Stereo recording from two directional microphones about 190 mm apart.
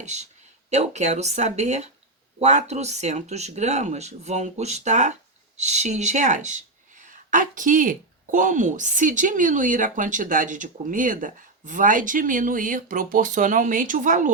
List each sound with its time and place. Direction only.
0.0 s speech: 35° right (ahead or behind)